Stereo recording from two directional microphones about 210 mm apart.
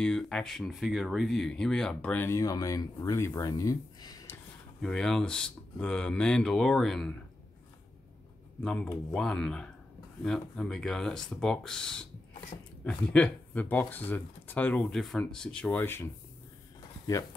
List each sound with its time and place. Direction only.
0.0 s speech: 5° left (ahead or behind)
4.8 s speech: 5° left (ahead or behind)
8.6 s speech: 5° left (ahead or behind)